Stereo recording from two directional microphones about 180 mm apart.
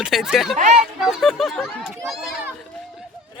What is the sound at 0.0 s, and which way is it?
Speech, centre (ahead or behind).